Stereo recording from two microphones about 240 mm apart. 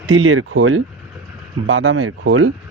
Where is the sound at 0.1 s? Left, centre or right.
Right.